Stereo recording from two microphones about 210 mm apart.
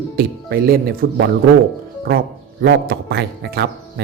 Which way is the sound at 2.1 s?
50° right (ahead or behind).